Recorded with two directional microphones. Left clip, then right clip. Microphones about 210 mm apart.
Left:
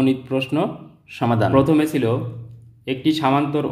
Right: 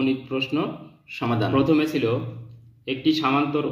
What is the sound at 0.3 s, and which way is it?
A man's voice, 45° left (ahead or behind).